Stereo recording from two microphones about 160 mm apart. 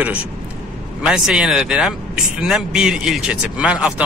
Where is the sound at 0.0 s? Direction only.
10° right (ahead or behind).